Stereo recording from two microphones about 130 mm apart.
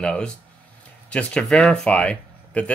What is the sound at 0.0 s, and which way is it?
Speech, 5° left (ahead or behind).